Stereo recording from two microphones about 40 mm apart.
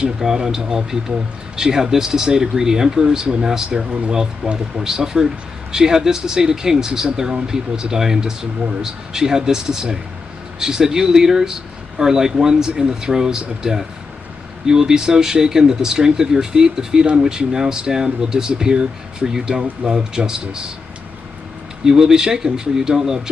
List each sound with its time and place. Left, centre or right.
0.0 s speech: centre
21.8 s speech: centre